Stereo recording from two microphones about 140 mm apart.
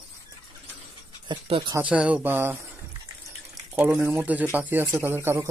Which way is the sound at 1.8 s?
10° right (ahead or behind).